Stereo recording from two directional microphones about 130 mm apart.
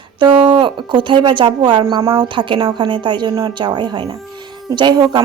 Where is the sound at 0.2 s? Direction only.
35° right (ahead or behind).